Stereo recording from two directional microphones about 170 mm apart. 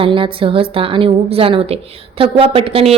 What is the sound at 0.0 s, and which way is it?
A woman's voice, 30° right (ahead or behind).